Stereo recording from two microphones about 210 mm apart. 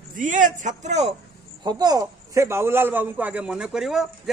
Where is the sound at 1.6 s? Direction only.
20° right (ahead or behind).